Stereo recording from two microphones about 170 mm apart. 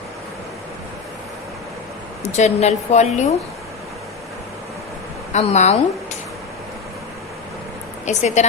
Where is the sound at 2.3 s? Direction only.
40° left (ahead or behind).